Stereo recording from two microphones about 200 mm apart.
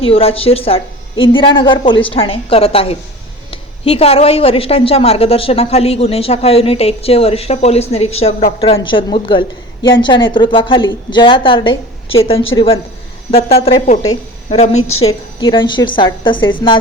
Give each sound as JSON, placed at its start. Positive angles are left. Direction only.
{"t": 0.0, "sound": "a woman's voice", "side_deg": 30}
{"t": 14.5, "sound": "a woman's voice", "side_deg": 35}
{"t": 14.8, "sound": "a woman's voice", "side_deg": 90}
{"t": 15.4, "sound": "a woman's voice", "side_deg": 20}